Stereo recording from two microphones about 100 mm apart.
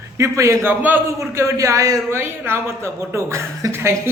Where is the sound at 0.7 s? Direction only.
15° right (ahead or behind).